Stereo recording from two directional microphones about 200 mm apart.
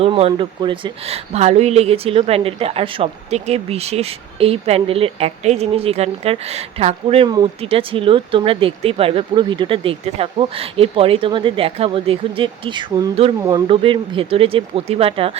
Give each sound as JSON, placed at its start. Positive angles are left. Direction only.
{"t": 0.0, "sound": "speech", "side_deg": -30}